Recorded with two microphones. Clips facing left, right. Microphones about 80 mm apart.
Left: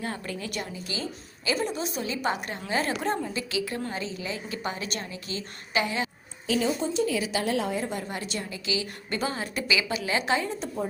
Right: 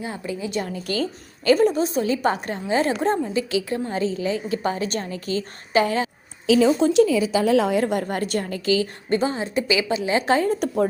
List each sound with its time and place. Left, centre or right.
0.0 s a woman's voice: centre
0.7 s a woman's voice: right
1.5 s a woman's voice: right
2.6 s a woman's voice: right
6.7 s a woman's voice: right
9.0 s a woman's voice: right